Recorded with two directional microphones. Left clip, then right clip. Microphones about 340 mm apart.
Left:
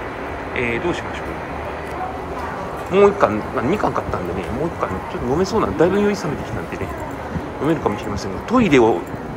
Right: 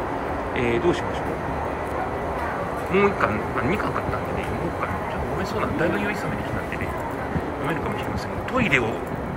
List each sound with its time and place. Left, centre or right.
2.9 s speech: centre
5.4 s speech: centre
8.5 s speech: centre